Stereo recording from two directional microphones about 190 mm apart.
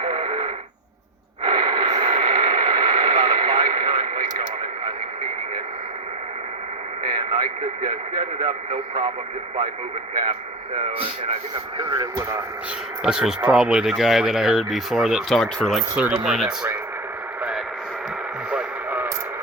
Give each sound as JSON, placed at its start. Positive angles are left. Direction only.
{"t": 0.0, "sound": "radio", "side_deg": -30}
{"t": 1.4, "sound": "a sound", "side_deg": -25}
{"t": 7.0, "sound": "radio", "side_deg": -30}
{"t": 11.8, "sound": "speech", "side_deg": -20}
{"t": 13.0, "sound": "speech", "side_deg": -5}
{"t": 18.5, "sound": "radio", "side_deg": -10}